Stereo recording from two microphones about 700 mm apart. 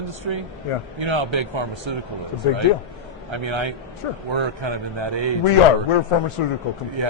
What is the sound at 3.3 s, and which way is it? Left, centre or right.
A man's voice, right.